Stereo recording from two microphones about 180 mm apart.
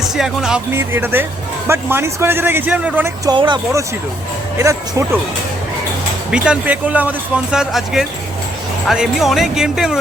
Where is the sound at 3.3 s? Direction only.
25° right (ahead or behind).